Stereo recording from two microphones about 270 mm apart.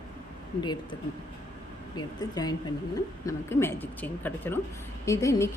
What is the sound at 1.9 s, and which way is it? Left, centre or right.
A woman's voice, centre.